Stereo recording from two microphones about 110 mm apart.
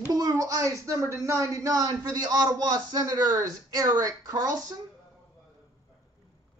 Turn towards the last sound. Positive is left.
turn(degrees=-35)  # may be behind; listen again after turning